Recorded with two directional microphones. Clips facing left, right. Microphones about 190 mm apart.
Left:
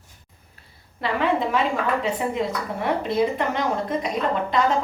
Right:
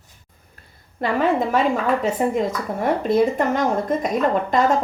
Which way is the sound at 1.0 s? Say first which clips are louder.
Right 3 dB; 45° right (ahead or behind).